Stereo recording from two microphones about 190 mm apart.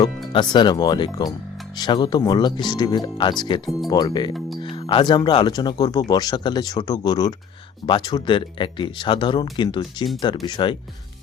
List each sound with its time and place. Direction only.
0.3 s speech: 25° left (ahead or behind)